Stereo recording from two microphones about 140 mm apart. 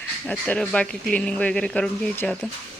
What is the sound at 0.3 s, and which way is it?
Speech, 10° left (ahead or behind).